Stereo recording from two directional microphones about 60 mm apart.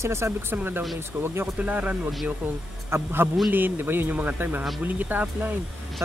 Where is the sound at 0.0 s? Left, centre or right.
Right.